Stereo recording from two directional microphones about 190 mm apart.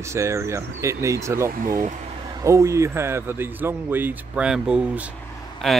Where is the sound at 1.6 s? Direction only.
45° right (ahead or behind).